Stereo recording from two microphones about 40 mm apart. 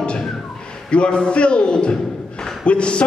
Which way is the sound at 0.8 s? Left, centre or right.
Left.